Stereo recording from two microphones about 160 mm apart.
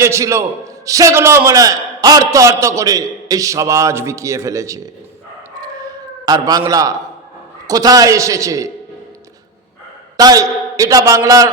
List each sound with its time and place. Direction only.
0.0 s a man's voice: 20° right (ahead or behind)
5.5 s howl: 25° right (ahead or behind)
6.6 s a man's voice: 20° right (ahead or behind)
10.2 s a man's voice: 20° right (ahead or behind)